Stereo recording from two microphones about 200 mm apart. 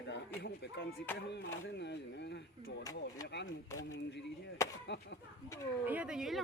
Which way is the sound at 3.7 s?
15° left (ahead or behind).